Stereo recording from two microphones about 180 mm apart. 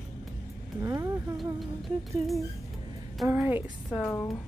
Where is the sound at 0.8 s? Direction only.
20° right (ahead or behind).